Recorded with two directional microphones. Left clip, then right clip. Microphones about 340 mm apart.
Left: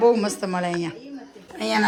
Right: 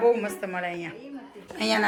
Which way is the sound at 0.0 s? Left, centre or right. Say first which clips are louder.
Left 4 dB; centre.